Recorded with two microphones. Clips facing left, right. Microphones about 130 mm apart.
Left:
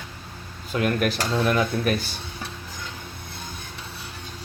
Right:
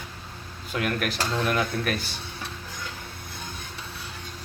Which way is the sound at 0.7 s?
35° left (ahead or behind).